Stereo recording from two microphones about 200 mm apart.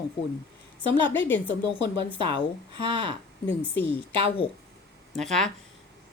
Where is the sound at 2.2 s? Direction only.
25° right (ahead or behind).